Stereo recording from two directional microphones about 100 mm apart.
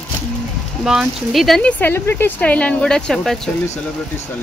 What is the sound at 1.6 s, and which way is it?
Speech, 15° left (ahead or behind).